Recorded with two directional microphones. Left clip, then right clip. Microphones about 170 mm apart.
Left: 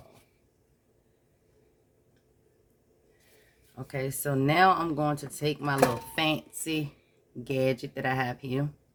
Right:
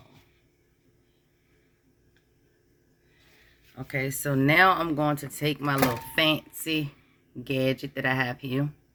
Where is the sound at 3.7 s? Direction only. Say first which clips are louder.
Right 3 dB; 25° left (ahead or behind).